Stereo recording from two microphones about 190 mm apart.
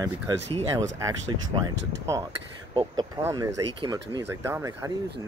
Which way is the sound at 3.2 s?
15° right (ahead or behind).